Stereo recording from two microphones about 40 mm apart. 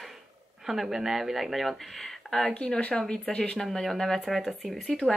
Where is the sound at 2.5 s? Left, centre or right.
Left; by 4.2 s centre.